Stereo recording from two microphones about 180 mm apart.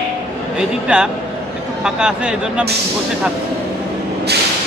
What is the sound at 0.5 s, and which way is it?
Speech, 5° right (ahead or behind).